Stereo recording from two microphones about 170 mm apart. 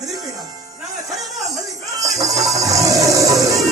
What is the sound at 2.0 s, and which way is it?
Music, 20° right (ahead or behind).